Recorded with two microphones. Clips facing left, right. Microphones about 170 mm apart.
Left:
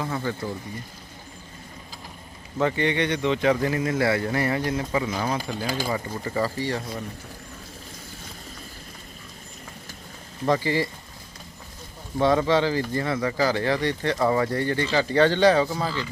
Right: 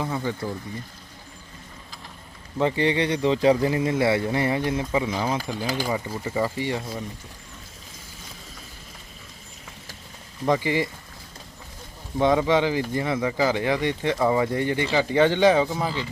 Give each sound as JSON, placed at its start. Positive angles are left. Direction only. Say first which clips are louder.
{"t": 0.0, "sound": "speech", "louder": "right 1 dB", "side_deg": -15}
{"t": 2.6, "sound": "speech", "louder": "right 1 dB", "side_deg": -25}
{"t": 5.5, "sound": "speech", "louder": "right 1 dB", "side_deg": -10}
{"t": 10.4, "sound": "speech", "louder": "even", "side_deg": -15}
{"t": 12.2, "sound": "speech", "louder": "even", "side_deg": -15}